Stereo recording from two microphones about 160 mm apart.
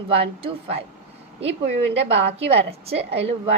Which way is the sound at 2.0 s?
40° right (ahead or behind).